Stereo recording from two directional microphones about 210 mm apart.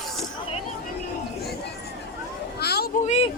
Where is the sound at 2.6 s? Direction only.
50° left (ahead or behind).